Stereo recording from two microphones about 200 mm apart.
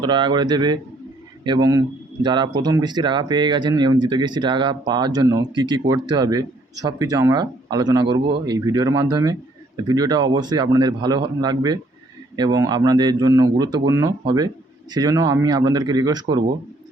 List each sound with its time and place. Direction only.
0.0 s speech: 20° right (ahead or behind)